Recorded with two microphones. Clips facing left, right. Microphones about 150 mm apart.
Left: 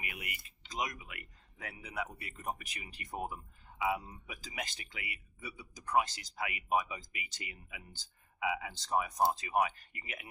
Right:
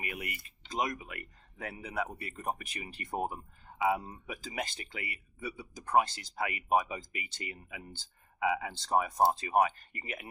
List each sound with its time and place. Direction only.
0.0 s speech: 40° right (ahead or behind)
6.3 s speech: 40° right (ahead or behind)